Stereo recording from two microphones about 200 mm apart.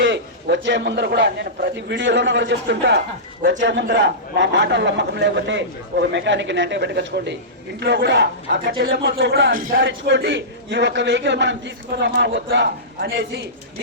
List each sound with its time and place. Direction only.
0.0 s a man's voice: 60° right (ahead or behind); by 9.8 s 45° right (ahead or behind)
9.8 s a man's voice: 65° right (ahead or behind)